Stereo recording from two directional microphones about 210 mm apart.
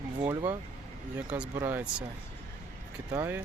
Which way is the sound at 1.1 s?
10° right (ahead or behind).